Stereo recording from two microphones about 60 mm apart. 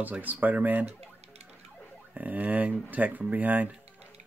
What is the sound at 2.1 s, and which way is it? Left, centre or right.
Speech, right.